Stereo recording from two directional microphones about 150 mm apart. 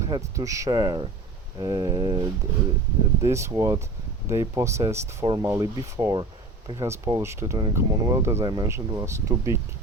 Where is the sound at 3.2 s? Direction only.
20° right (ahead or behind).